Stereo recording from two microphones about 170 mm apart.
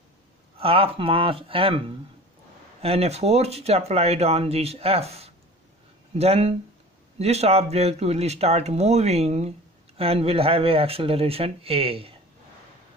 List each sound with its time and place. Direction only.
0.6 s speech: 35° right (ahead or behind)